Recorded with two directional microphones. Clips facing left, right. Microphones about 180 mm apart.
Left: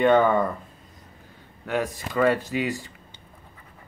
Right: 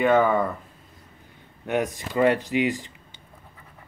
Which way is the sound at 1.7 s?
20° right (ahead or behind).